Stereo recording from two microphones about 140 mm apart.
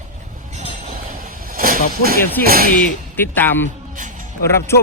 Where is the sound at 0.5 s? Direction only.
55° right (ahead or behind); by 1.8 s 90° right.